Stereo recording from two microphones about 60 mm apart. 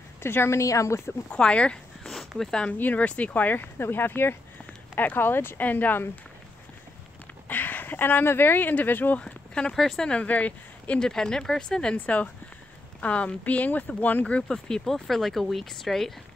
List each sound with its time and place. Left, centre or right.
0.2 s speech: left
0.6 s a woman's voice: left
1.3 s speech: centre
2.0 s a sound: centre
2.8 s speech: left
7.4 s speech: left
9.2 s speech: centre
10.0 s speech: left
11.0 s speech: centre
11.9 s speech: left
14.2 s speech: centre